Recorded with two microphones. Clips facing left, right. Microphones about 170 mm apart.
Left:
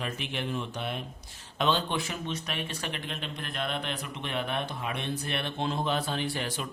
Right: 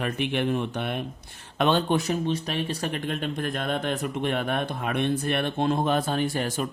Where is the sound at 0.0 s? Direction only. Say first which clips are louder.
Right 8 dB; 60° right (ahead or behind).